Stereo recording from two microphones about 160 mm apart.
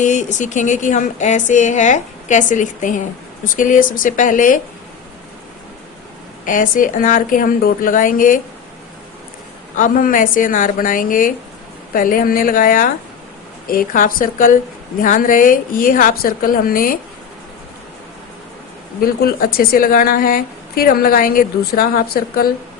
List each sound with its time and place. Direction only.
0.0 s a woman's voice: 50° left (ahead or behind)
6.4 s a woman's voice: 55° left (ahead or behind)
9.7 s a woman's voice: 60° left (ahead or behind)
18.9 s a woman's voice: 70° left (ahead or behind)